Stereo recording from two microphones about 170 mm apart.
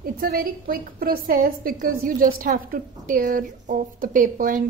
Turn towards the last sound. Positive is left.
turn(degrees=-50)  # may be behind; listen again after turning